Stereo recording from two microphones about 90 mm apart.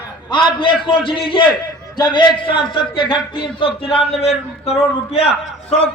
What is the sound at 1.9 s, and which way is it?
A man's voice, 50° left (ahead or behind).